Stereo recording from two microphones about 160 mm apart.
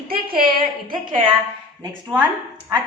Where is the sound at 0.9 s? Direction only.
30° right (ahead or behind).